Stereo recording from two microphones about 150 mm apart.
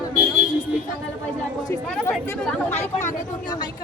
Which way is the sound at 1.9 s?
5° left (ahead or behind).